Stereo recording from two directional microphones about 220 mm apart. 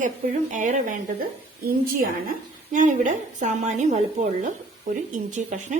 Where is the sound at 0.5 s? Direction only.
35° right (ahead or behind).